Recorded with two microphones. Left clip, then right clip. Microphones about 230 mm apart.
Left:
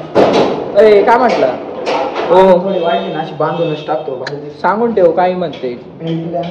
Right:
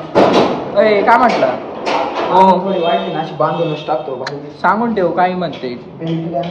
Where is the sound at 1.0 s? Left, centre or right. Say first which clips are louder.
Even; right.